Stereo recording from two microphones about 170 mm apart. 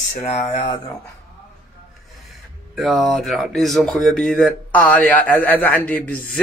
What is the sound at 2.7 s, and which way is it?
Speech, centre (ahead or behind).